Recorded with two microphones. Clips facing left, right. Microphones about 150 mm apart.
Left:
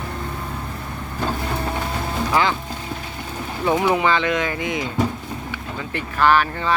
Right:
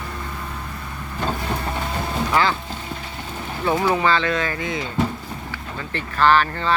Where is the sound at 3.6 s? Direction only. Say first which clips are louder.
Left 1 dB; 20° left (ahead or behind).